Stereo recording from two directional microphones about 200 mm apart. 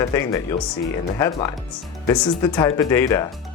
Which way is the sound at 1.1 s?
15° left (ahead or behind).